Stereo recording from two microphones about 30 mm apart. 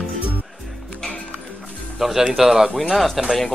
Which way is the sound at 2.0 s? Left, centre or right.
Centre.